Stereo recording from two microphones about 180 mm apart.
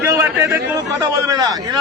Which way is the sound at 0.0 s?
15° right (ahead or behind).